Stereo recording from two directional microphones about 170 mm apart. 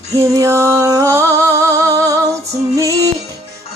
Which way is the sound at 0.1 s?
20° right (ahead or behind).